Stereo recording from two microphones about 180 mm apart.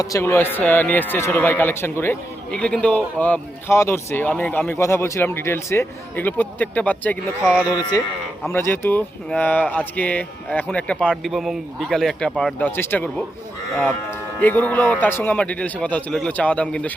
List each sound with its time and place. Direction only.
0.0 s speech: 15° left (ahead or behind)
7.7 s speech: 20° left (ahead or behind)